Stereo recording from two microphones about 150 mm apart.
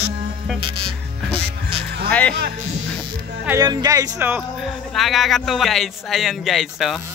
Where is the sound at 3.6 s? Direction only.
25° right (ahead or behind).